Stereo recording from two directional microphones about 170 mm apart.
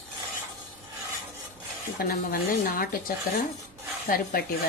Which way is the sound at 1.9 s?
60° left (ahead or behind).